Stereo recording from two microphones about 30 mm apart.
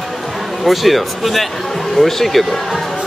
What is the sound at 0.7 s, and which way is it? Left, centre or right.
Speech, centre.